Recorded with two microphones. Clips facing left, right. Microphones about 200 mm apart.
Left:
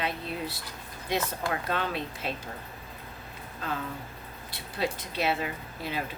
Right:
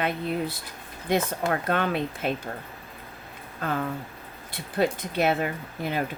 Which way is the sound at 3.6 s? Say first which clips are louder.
Right 6 dB; 55° right (ahead or behind).